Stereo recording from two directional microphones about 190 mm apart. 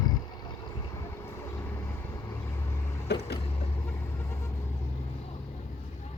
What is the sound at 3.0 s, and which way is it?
Vehicle, 60° left (ahead or behind).